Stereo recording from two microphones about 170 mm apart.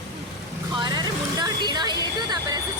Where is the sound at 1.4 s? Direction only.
25° right (ahead or behind).